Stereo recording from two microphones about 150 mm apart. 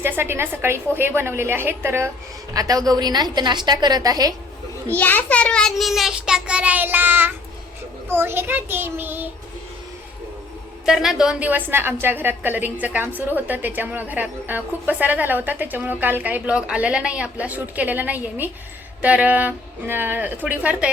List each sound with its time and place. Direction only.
0.0 s a woman's voice: 15° right (ahead or behind)
4.9 s a child's voice: 10° left (ahead or behind); by 9.3 s 15° right (ahead or behind)
10.8 s a woman's voice: 5° right (ahead or behind)